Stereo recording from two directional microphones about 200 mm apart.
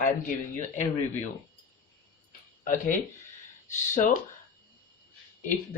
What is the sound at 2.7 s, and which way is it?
Speech, 40° left (ahead or behind).